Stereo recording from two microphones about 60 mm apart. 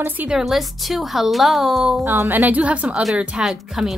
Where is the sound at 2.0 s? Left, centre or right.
Right.